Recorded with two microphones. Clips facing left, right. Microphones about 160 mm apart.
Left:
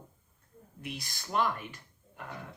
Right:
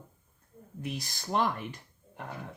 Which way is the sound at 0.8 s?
45° right (ahead or behind).